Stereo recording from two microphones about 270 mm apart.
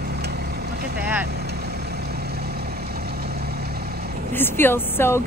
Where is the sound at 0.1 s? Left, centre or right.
Right.